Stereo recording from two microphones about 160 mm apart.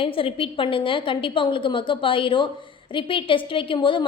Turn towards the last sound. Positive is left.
turn(degrees=30)  # may be behind; listen again after turning